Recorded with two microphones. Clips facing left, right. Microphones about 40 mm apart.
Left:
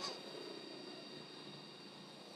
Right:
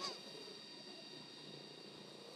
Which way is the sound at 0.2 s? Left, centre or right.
Centre.